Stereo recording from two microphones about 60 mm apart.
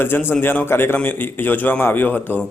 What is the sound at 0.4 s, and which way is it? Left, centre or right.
Speech, left.